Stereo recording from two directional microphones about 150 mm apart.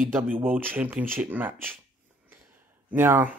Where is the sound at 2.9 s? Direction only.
15° right (ahead or behind).